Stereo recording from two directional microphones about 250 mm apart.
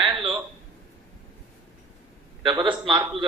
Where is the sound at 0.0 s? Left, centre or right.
Centre.